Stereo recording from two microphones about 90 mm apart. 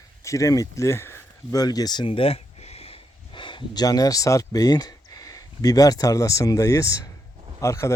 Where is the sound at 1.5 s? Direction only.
45° left (ahead or behind).